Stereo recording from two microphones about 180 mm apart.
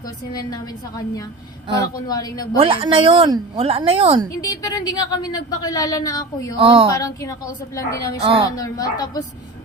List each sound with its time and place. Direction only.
0.5 s a woman's voice: 20° left (ahead or behind)
2.6 s speech: 30° right (ahead or behind)
4.4 s a woman's voice: 20° left (ahead or behind)
6.6 s speech: 30° right (ahead or behind)
6.9 s a woman's voice: 20° left (ahead or behind)